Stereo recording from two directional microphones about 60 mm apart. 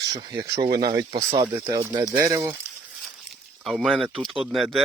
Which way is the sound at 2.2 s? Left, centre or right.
Right.